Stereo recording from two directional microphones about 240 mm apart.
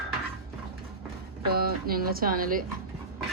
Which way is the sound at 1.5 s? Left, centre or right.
Right.